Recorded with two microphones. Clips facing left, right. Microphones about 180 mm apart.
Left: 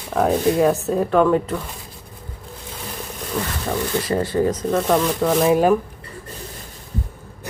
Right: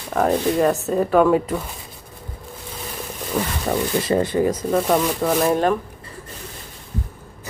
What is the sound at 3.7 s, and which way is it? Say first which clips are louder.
Speech: right 2 dB; 35° right (ahead or behind).